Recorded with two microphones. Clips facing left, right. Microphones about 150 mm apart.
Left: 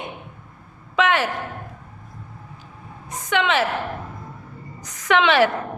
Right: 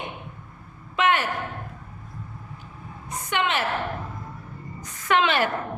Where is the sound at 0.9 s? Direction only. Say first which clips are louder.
Left 3 dB; 90° left.